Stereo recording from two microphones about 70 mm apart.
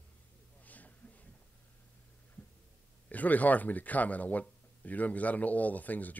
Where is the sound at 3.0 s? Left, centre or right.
Left.